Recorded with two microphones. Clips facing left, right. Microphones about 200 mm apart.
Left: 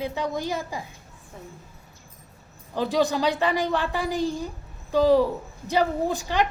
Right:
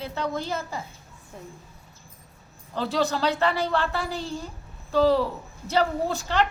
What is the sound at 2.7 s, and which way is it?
A woman's voice, 15° left (ahead or behind).